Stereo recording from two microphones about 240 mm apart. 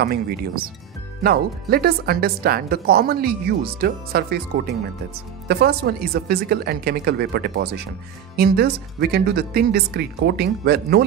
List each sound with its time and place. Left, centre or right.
0.0 s speech: right